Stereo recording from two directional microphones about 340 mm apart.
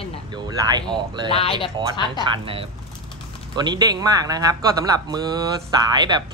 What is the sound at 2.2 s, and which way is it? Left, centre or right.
Speech, centre.